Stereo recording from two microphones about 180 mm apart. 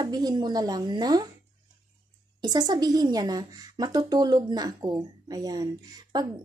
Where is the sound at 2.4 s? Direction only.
20° right (ahead or behind).